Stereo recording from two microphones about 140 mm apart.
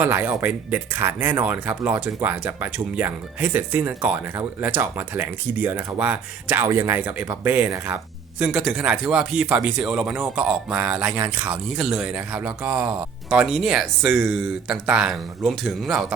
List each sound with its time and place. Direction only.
0.0 s speech: 15° right (ahead or behind)
8.4 s speech: 5° right (ahead or behind)